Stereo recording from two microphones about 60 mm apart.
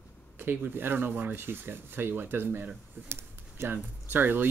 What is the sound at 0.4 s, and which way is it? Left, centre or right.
Speech, right.